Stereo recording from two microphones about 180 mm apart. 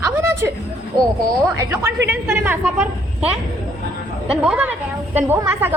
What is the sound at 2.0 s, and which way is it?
A woman's voice, 10° right (ahead or behind).